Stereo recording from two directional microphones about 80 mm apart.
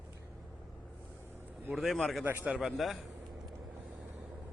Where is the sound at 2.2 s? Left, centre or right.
Right.